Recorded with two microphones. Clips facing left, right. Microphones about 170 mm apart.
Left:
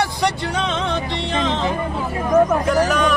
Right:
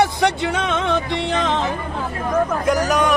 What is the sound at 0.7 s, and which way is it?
Music, 55° right (ahead or behind).